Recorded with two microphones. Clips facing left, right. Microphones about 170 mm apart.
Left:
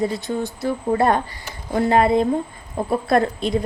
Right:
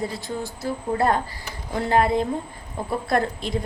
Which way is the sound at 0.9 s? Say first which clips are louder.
Left 1 dB; 20° left (ahead or behind).